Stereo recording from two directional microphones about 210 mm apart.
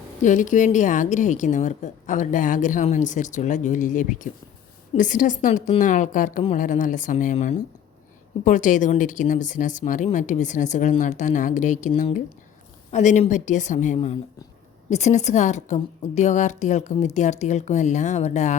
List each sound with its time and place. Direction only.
0.2 s a woman's voice: 35° left (ahead or behind)